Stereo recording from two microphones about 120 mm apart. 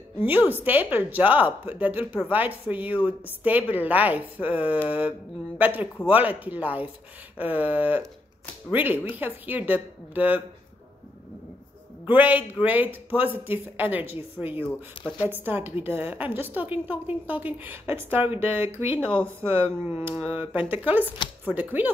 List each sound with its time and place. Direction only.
0.2 s speech: 15° right (ahead or behind)
12.1 s speech: 15° right (ahead or behind)
15.0 s speech: 45° left (ahead or behind)
15.4 s speech: 15° right (ahead or behind)